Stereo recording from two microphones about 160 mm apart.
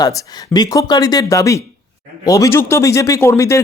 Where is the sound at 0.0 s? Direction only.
20° left (ahead or behind).